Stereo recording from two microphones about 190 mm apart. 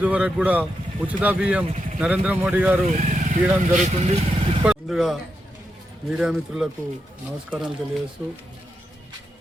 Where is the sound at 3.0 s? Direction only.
40° right (ahead or behind).